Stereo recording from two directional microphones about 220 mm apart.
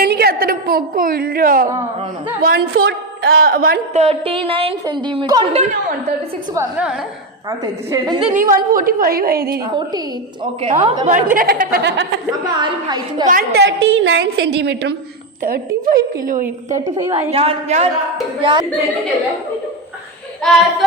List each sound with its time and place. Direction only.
0.0 s a sound: 45° right (ahead or behind)
2.4 s a woman's voice: 45° right (ahead or behind); by 5.5 s 20° right (ahead or behind)
6.5 s a woman's voice: 10° right (ahead or behind)
8.3 s a woman's voice: 40° right (ahead or behind)
10.4 s a woman's voice: 30° right (ahead or behind); by 12.0 s 50° right (ahead or behind)
12.5 s a woman's voice: 20° right (ahead or behind)
13.2 s a woman's voice: 40° right (ahead or behind)
17.3 s a woman's voice: 30° right (ahead or behind)
20.4 s speech: centre (ahead or behind)